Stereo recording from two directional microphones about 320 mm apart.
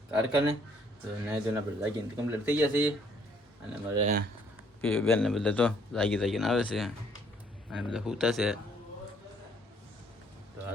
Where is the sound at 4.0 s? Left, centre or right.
Right.